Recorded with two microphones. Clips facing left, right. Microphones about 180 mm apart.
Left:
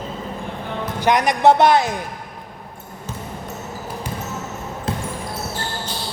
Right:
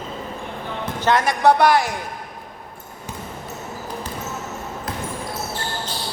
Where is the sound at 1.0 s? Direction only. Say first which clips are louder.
Left 2 dB; 15° left (ahead or behind).